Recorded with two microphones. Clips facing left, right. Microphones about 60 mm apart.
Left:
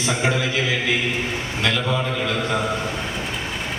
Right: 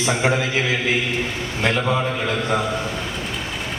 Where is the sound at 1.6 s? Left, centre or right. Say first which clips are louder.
Right 3 dB; right.